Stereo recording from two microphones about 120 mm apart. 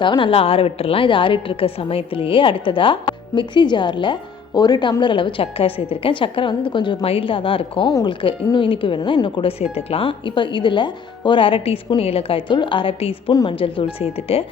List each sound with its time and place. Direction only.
0.0 s a woman's voice: 45° left (ahead or behind)